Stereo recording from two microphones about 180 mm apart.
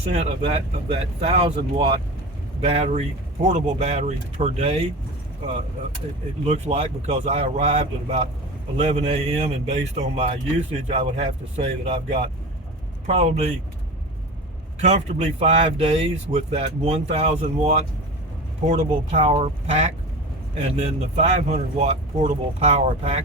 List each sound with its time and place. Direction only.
0.0 s speech: 35° right (ahead or behind)
6.4 s speech: 35° right (ahead or behind)
14.8 s speech: 40° right (ahead or behind)